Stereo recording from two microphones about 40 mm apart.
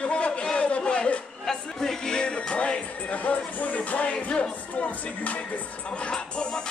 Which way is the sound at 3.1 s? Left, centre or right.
Left.